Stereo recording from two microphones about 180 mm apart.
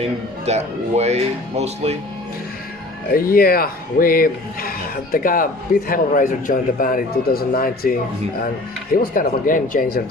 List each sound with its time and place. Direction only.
0.0 s speech: 35° right (ahead or behind)
3.1 s a man's voice: 55° left (ahead or behind)